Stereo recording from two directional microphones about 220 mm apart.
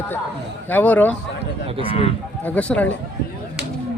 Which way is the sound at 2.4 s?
5° left (ahead or behind).